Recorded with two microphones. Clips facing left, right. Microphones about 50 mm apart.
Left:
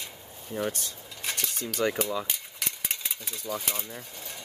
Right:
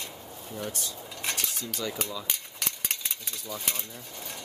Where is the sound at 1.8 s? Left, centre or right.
Left.